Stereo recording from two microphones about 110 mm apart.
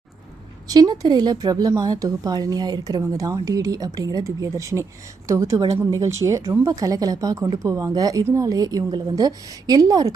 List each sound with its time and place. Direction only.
0.7 s a woman's voice: 35° right (ahead or behind)